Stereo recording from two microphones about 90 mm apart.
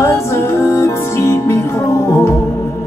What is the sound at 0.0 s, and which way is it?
Music, 30° left (ahead or behind).